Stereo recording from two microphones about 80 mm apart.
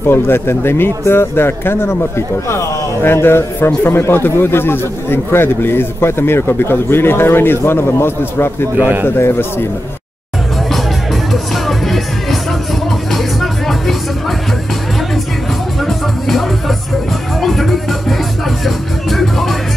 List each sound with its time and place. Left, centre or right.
0.0 s speech: left
8.7 s a man's voice: right
9.0 s speech: left
11.5 s music: centre
15.8 s music: centre